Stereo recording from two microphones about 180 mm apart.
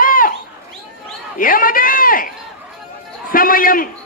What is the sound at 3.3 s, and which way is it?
Speech, 50° left (ahead or behind).